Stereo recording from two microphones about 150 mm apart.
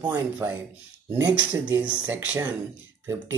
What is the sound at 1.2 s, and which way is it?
Speech, 20° right (ahead or behind).